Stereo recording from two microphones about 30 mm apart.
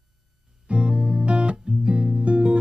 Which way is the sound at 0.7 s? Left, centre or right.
Right.